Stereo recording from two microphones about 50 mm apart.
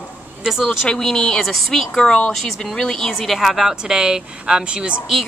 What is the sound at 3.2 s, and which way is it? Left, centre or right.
Speech, centre.